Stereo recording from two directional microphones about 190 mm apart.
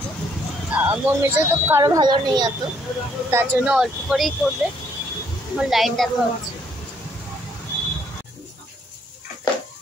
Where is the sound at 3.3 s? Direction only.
10° right (ahead or behind).